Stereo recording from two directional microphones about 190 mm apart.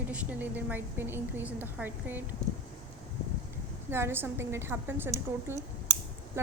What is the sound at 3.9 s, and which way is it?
A woman's voice, 10° right (ahead or behind).